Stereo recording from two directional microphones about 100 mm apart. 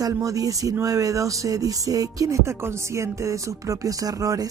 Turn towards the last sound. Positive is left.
turn(degrees=-35)  # may be behind; listen again after turning